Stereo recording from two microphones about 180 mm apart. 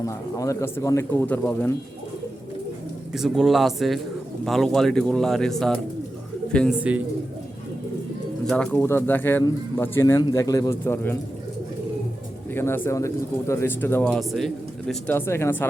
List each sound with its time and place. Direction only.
0.0 s speech: 15° left (ahead or behind)
3.1 s speech: centre (ahead or behind)
8.4 s speech: 5° left (ahead or behind)
12.5 s speech: 10° left (ahead or behind)
15.1 s speech: 15° left (ahead or behind)